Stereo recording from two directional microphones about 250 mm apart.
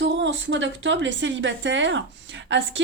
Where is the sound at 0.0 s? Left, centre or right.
Right.